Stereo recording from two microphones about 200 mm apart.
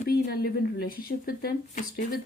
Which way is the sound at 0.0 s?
50° left (ahead or behind).